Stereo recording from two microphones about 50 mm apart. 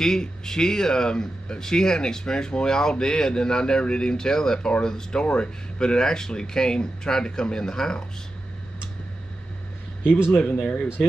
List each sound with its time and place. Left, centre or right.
0.0 s speech: centre
10.6 s speech: left